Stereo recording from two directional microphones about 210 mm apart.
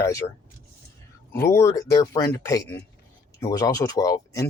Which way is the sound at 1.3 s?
10° left (ahead or behind).